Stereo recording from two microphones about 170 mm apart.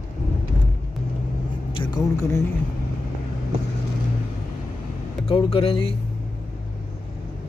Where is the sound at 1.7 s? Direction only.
25° left (ahead or behind).